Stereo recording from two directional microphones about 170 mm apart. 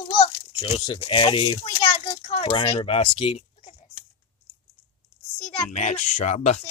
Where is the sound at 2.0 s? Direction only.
30° left (ahead or behind).